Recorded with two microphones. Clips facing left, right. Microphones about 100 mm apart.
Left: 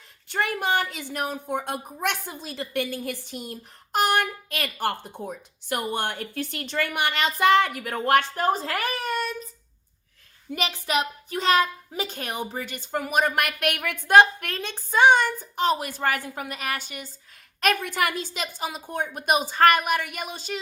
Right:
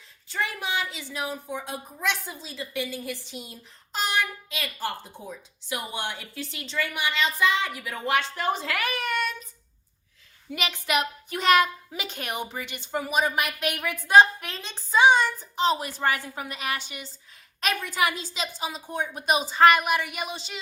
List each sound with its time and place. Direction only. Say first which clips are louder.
0.3 s a woman's voice: left 5 dB; 55° left (ahead or behind); by 9.5 s 35° left (ahead or behind)
10.5 s a child's voice: left 1 dB; 35° left (ahead or behind)